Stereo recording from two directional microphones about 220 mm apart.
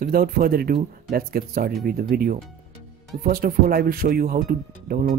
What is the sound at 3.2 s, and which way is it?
Speech, 40° right (ahead or behind).